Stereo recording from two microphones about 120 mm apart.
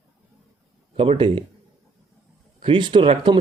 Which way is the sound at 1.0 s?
45° right (ahead or behind).